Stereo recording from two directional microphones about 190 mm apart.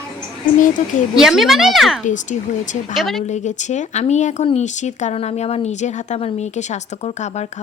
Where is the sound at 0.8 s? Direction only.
40° left (ahead or behind).